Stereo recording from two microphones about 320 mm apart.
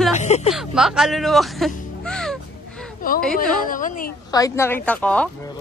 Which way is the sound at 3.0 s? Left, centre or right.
Left.